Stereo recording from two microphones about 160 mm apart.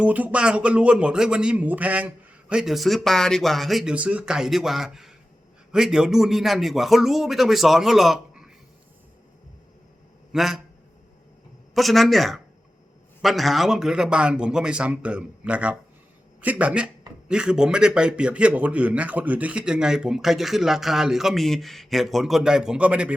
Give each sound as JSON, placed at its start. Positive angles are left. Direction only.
{"t": 0.0, "sound": "a man's voice", "side_deg": -10}
{"t": 10.3, "sound": "a man's voice", "side_deg": 0}
{"t": 11.7, "sound": "a man's voice", "side_deg": 0}